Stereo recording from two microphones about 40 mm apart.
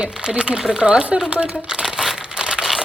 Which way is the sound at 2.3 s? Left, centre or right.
Centre.